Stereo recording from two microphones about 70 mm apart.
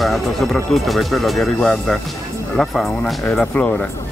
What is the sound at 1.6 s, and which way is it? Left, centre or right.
Speech, centre.